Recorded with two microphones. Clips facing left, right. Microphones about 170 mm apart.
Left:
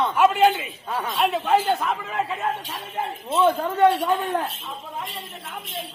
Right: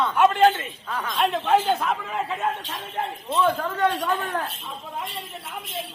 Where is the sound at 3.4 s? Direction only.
20° left (ahead or behind).